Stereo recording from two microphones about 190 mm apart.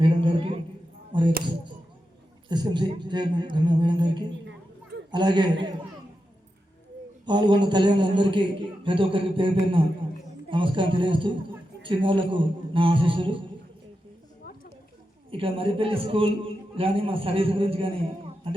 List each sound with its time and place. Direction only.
0.0 s a sound: 25° right (ahead or behind)
1.1 s a man's voice: 25° right (ahead or behind)
2.5 s a man's voice: 20° right (ahead or behind)
7.3 s a man's voice: 25° right (ahead or behind)
15.3 s a man's voice: 30° right (ahead or behind)